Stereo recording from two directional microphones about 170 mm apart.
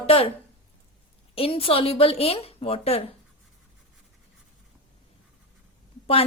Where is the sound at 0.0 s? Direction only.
35° left (ahead or behind).